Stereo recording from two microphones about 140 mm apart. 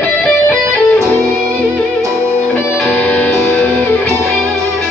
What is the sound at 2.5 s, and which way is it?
Music, 10° left (ahead or behind).